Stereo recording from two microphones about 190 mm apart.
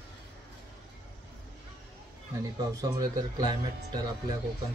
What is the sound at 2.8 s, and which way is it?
Speech, 20° right (ahead or behind).